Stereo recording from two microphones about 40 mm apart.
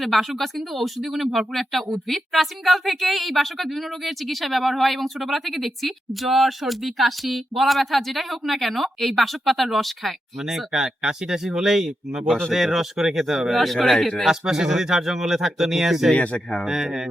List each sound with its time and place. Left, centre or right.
0.0 s speech: centre
10.5 s speech: centre
14.3 s speech: centre
16.1 s speech: left
16.6 s speech: centre